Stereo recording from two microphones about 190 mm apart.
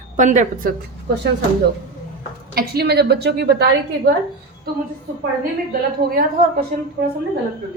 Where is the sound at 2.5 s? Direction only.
55° right (ahead or behind).